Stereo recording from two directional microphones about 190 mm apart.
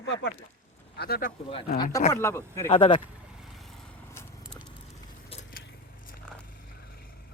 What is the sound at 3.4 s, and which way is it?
Vehicle, centre (ahead or behind).